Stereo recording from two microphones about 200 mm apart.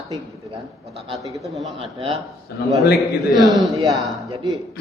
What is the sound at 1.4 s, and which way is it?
Speech, centre (ahead or behind).